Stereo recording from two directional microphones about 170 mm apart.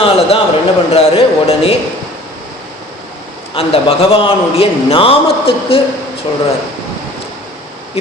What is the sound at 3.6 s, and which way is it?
Speech, 35° left (ahead or behind).